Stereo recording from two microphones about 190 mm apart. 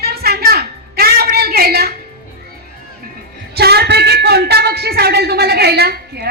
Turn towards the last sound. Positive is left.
turn(degrees=-55)  # may be behind; listen again after turning